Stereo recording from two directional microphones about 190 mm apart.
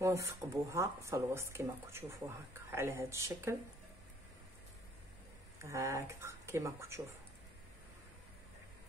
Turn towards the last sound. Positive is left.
turn(degrees=-15)  # may be behind; listen again after turning